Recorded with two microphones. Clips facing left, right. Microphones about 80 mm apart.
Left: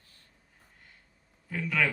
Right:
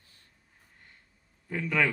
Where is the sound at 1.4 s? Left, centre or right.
Centre.